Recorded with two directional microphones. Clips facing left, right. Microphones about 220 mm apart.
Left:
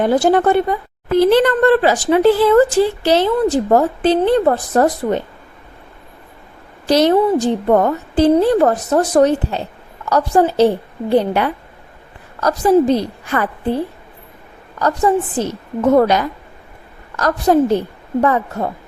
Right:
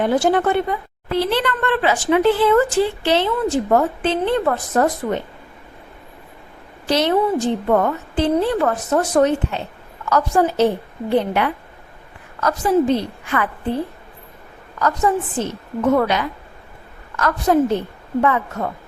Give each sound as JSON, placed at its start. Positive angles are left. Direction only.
{"t": 0.0, "sound": "a woman's voice", "side_deg": 40}
{"t": 6.8, "sound": "a woman's voice", "side_deg": 40}
{"t": 14.8, "sound": "a woman's voice", "side_deg": 35}